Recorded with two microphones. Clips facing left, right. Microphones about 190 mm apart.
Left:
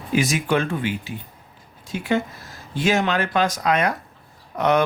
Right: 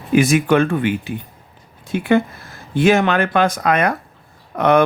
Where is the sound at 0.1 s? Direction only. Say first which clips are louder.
Right 7 dB; 55° right (ahead or behind).